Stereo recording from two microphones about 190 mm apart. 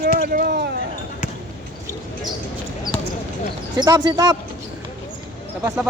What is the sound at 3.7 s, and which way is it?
Speech, 20° right (ahead or behind).